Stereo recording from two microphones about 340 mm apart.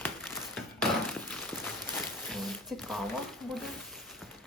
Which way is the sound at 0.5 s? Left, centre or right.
Centre.